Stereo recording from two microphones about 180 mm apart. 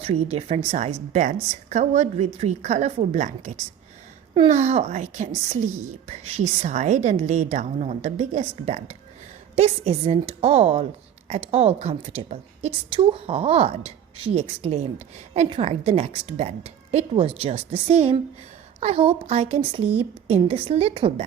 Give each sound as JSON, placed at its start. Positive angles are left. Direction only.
{"t": 0.0, "sound": "a woman's voice", "side_deg": -35}